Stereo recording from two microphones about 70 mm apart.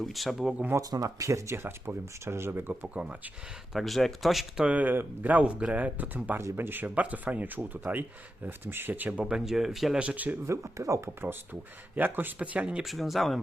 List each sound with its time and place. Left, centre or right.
0.0 s speech: centre
0.8 s speech: right
1.5 s speech: right
2.8 s speech: centre
3.7 s speech: centre
4.6 s speech: right; by 10.0 s centre
10.0 s speech: centre
10.4 s speech: right
11.9 s speech: right
12.8 s speech: centre